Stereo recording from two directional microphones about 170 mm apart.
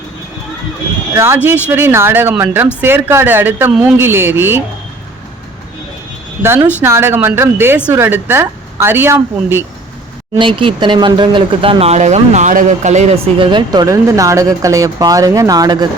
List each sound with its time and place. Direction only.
1.1 s speech: 15° right (ahead or behind)
6.8 s speech: 15° right (ahead or behind)
10.3 s speech: 30° right (ahead or behind)